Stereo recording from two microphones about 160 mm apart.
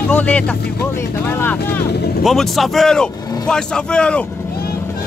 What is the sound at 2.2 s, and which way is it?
Speech, centre (ahead or behind).